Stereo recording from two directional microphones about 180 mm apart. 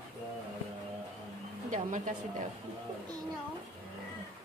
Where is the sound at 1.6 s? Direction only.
45° right (ahead or behind).